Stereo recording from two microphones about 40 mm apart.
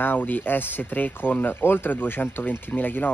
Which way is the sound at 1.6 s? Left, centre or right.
Left.